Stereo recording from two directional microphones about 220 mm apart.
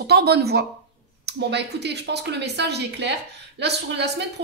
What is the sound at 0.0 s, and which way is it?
A woman's voice, 45° right (ahead or behind).